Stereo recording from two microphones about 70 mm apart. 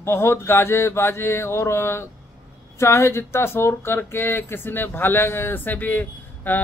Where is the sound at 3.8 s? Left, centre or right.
Left.